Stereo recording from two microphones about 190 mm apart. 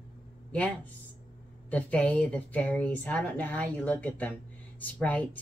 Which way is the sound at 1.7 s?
5° left (ahead or behind).